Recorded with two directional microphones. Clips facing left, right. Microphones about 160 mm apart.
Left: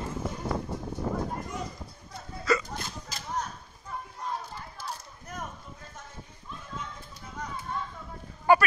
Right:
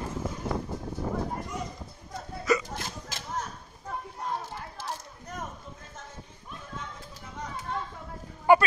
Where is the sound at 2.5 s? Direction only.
20° right (ahead or behind).